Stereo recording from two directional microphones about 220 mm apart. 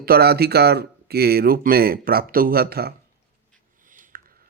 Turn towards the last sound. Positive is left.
turn(degrees=-40)  # may be behind; listen again after turning